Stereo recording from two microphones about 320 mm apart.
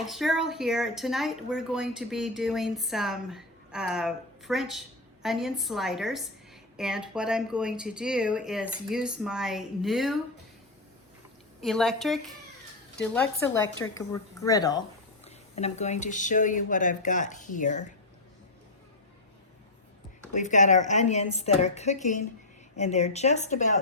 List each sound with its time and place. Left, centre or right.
0.0 s speech: centre
11.6 s a woman's voice: centre; by 17.9 s left
20.3 s a woman's voice: left